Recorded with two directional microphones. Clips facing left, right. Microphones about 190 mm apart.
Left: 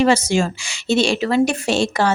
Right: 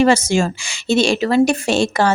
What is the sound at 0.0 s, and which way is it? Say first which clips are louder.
A woman's voice: right 2 dB; 50° right (ahead or behind).